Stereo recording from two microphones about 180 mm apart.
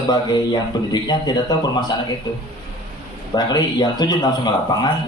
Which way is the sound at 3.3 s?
20° left (ahead or behind).